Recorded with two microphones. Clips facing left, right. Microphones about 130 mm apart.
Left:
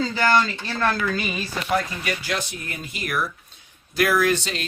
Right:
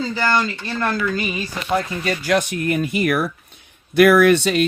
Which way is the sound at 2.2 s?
60° right (ahead or behind).